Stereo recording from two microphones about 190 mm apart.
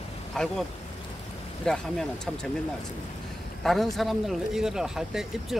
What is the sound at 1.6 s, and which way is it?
Speech, centre (ahead or behind).